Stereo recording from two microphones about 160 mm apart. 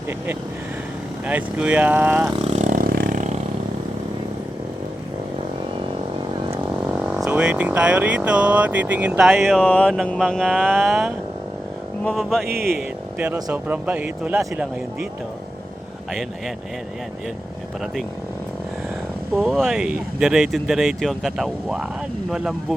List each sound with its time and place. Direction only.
1.3 s speech: 10° right (ahead or behind)
2.5 s vehicle: 50° right (ahead or behind)
6.8 s speech: 10° right (ahead or behind)
12.6 s speech: 10° right (ahead or behind)
19.3 s speech: centre (ahead or behind)